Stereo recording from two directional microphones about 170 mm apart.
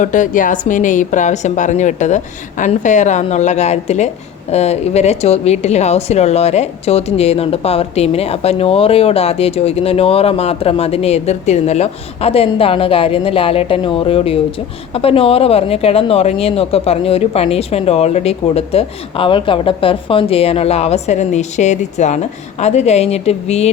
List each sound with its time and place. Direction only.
0.0 s a woman's voice: 50° left (ahead or behind)